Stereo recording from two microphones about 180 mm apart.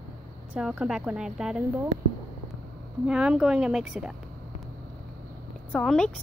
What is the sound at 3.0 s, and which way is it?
A woman's voice, 5° right (ahead or behind).